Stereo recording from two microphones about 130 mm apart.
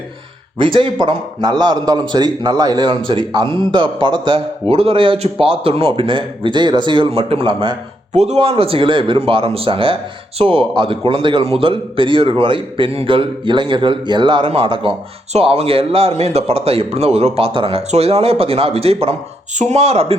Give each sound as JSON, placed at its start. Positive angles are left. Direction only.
{"t": 0.6, "sound": "a man's voice", "side_deg": -40}
{"t": 8.1, "sound": "speech", "side_deg": -60}
{"t": 8.4, "sound": "a man's voice", "side_deg": -50}